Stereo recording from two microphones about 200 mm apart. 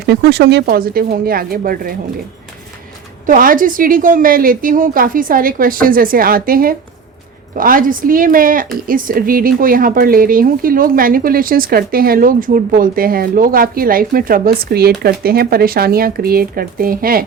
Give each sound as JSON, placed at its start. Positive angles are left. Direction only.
{"t": 0.0, "sound": "speech", "side_deg": -55}
{"t": 3.2, "sound": "speech", "side_deg": -45}